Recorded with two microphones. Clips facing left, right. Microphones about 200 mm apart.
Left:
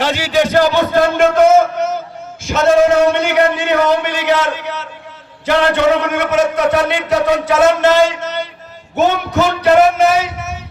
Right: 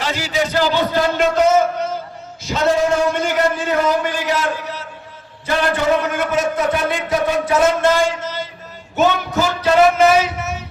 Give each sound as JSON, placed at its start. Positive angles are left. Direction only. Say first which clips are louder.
{"t": 0.0, "sound": "speech", "louder": "left 6 dB", "side_deg": 75}
{"t": 0.6, "sound": "a man's voice", "louder": "left 4 dB", "side_deg": 55}
{"t": 2.5, "sound": "speech", "louder": "left 5 dB", "side_deg": 80}
{"t": 9.5, "sound": "music", "louder": "left 7 dB", "side_deg": 60}